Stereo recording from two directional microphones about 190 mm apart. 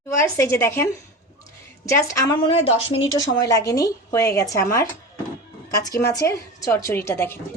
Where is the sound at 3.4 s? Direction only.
20° left (ahead or behind).